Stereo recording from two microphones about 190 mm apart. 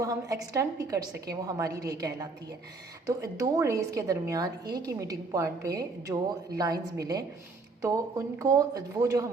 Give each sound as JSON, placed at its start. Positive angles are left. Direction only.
{"t": 0.0, "sound": "a woman's voice", "side_deg": -15}